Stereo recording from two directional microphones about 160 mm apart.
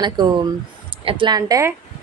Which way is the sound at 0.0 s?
25° right (ahead or behind).